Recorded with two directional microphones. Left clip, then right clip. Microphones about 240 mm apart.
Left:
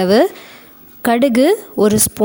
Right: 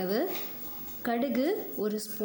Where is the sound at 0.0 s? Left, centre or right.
Left.